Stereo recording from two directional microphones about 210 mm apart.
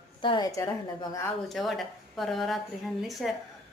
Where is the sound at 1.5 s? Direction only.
Centre (ahead or behind).